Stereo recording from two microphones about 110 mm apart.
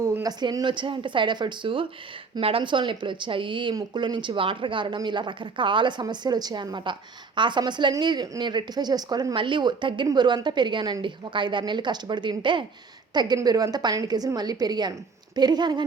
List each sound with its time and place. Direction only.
0.0 s a woman's voice: 30° right (ahead or behind)